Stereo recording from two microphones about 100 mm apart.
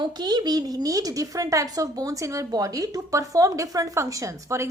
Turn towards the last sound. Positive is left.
turn(degrees=-30)  # may be behind; listen again after turning